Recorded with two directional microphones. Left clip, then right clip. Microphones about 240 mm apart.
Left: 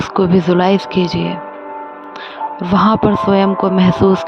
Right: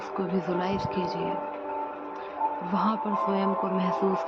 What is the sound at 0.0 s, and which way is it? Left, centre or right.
Speech, left.